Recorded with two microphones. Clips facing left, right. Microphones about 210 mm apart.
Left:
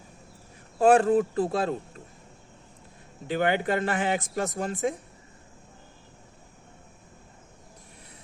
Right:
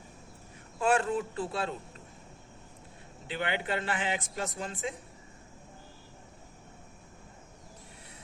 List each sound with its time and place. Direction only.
0.8 s speech: 40° left (ahead or behind)
3.2 s a man's voice: 45° left (ahead or behind)